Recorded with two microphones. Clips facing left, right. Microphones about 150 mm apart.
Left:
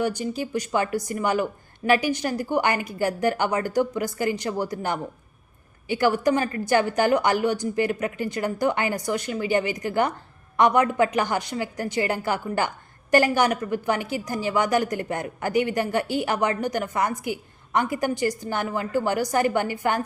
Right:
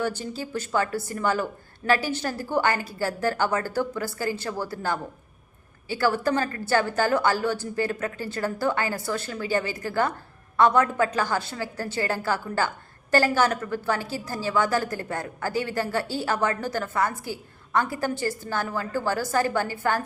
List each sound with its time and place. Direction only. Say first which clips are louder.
0.0 s a woman's voice: left 3 dB; 15° left (ahead or behind)